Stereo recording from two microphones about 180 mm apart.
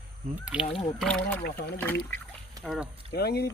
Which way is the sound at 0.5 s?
5° right (ahead or behind).